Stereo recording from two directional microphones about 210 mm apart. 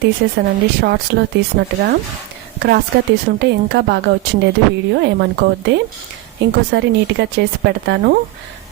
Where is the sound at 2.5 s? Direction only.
50° right (ahead or behind).